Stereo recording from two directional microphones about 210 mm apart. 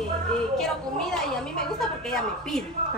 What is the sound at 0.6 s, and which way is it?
A woman's voice, centre (ahead or behind).